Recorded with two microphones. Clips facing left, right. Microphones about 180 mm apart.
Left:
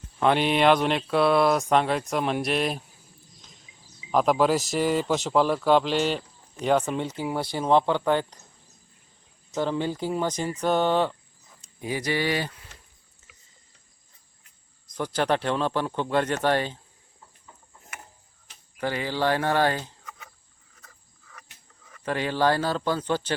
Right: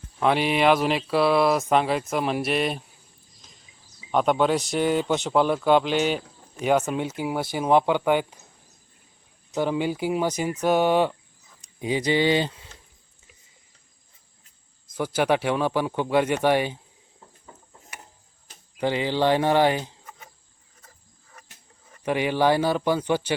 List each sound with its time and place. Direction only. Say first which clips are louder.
0.2 s speech: even; 5° right (ahead or behind)
3.2 s a sound: left 2 dB; centre (ahead or behind)
4.1 s speech: even; centre (ahead or behind)
9.6 s speech: right 2 dB; 10° right (ahead or behind)
14.8 s speech: right 2 dB; 5° right (ahead or behind)
18.8 s speech: right 4 dB; 20° right (ahead or behind)
20.8 s wild animals: even; 30° right (ahead or behind)
22.0 s speech: right 2 dB; 15° right (ahead or behind)